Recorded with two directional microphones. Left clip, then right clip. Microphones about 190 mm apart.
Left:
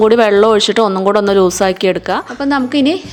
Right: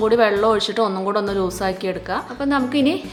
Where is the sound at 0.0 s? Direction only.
40° left (ahead or behind).